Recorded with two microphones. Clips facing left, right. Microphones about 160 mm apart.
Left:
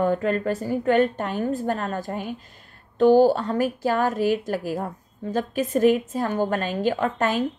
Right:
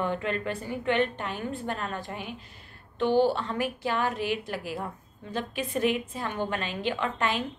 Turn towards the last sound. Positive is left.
turn(degrees=45)  # may be behind; listen again after turning